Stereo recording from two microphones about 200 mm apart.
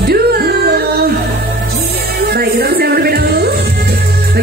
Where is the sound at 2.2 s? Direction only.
50° right (ahead or behind).